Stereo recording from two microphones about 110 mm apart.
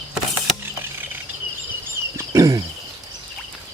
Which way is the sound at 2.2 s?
30° right (ahead or behind).